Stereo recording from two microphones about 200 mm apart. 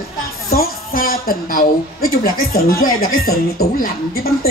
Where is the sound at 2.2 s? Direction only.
45° left (ahead or behind).